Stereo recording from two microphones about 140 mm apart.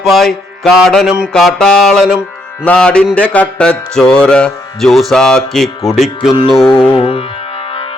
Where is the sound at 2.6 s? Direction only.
10° left (ahead or behind).